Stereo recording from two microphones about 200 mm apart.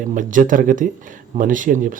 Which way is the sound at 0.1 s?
40° right (ahead or behind).